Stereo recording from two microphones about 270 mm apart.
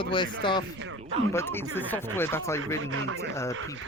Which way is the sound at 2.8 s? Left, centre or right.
Right.